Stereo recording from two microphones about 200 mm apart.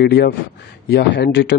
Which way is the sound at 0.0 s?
55° left (ahead or behind).